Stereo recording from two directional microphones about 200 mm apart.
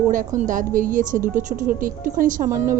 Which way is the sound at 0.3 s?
40° right (ahead or behind).